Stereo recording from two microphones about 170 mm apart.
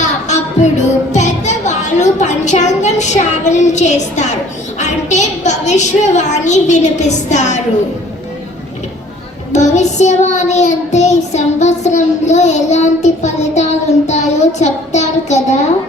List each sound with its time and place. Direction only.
0.0 s music: 45° left (ahead or behind)
1.1 s a woman's voice: 45° left (ahead or behind)
9.5 s child singing: 45° left (ahead or behind)